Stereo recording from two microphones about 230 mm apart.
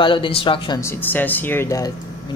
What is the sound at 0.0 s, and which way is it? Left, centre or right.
Speech, left.